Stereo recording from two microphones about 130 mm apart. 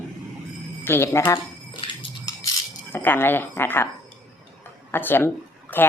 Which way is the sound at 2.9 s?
15° left (ahead or behind).